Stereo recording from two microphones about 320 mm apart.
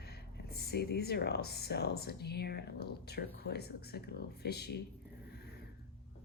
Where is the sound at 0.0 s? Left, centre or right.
Left.